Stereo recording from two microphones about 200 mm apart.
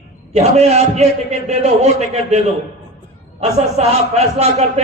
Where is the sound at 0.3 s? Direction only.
35° right (ahead or behind).